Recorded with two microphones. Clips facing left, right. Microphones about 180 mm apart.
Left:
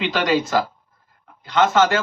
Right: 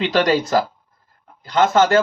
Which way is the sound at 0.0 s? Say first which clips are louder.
Right 3 dB; 40° right (ahead or behind).